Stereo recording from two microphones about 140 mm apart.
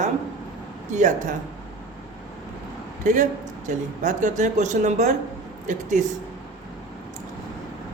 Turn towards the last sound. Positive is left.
turn(degrees=-60)  # may be behind; listen again after turning